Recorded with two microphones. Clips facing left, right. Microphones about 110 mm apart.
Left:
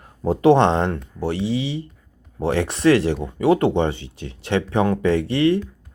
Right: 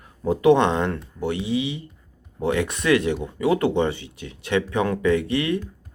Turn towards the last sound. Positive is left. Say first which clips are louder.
# left 3 dB
turn(degrees=30)  # may be behind; listen again after turning